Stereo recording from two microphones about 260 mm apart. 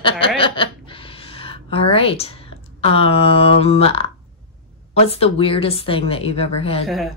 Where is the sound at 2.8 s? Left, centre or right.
Left.